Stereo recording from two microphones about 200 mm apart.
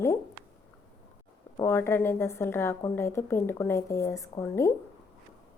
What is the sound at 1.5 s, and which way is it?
A woman's voice, 10° left (ahead or behind).